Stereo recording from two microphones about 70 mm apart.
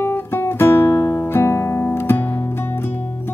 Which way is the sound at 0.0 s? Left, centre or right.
Left.